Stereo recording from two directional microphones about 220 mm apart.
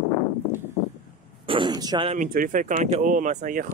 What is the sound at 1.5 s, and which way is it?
Speech, 20° right (ahead or behind).